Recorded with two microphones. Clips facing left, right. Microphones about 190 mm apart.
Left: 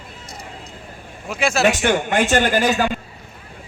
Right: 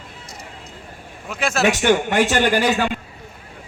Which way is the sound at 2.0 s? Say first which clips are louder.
Even; 50° left (ahead or behind).